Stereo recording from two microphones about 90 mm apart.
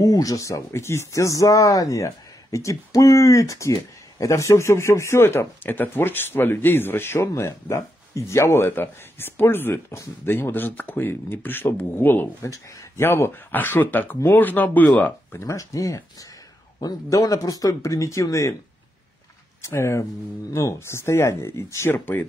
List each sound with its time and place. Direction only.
0.0 s speech: 40° left (ahead or behind); by 15.1 s 20° left (ahead or behind)
15.3 s speech: 35° left (ahead or behind)
19.6 s speech: 30° left (ahead or behind)